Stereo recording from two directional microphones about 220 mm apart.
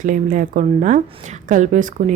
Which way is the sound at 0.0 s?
35° right (ahead or behind).